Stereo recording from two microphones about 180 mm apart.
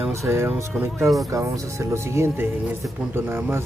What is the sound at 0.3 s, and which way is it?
Speech, 10° right (ahead or behind).